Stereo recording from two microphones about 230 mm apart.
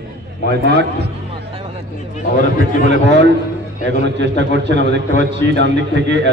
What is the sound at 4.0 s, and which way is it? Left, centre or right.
Speech, right.